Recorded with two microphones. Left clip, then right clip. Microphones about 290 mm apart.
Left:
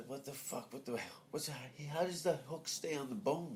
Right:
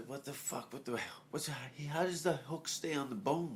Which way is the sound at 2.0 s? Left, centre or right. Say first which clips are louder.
Right 1 dB; right.